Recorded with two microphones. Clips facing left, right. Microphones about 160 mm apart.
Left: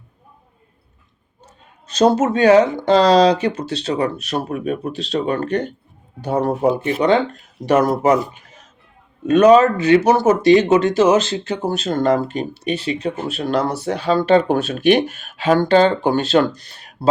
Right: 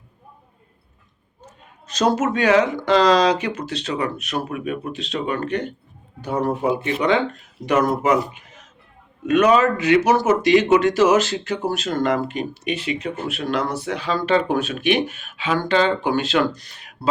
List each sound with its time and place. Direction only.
1.5 s speech: 30° left (ahead or behind)